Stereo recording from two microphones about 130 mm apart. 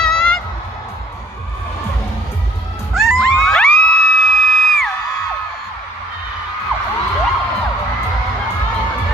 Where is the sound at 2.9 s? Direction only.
Centre (ahead or behind).